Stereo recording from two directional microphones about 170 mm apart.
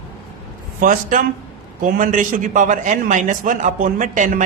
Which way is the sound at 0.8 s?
50° right (ahead or behind).